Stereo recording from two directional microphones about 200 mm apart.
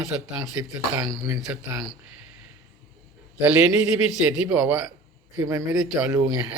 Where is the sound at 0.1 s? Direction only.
10° right (ahead or behind).